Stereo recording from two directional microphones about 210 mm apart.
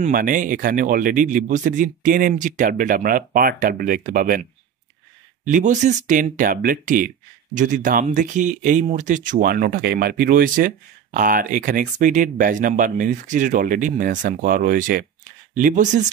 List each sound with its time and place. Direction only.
0.0 s speech: 40° right (ahead or behind)
5.4 s speech: 35° right (ahead or behind)